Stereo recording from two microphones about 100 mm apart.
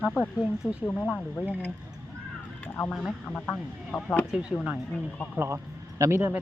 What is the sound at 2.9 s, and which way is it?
Speech, centre (ahead or behind).